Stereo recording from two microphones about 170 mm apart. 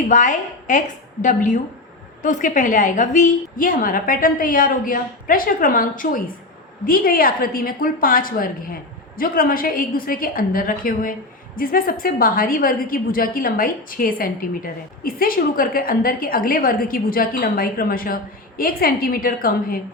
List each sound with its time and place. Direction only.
0.1 s a woman's voice: 45° left (ahead or behind)